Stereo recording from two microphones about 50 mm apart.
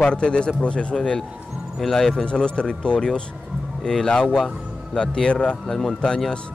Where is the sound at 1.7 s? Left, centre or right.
Centre.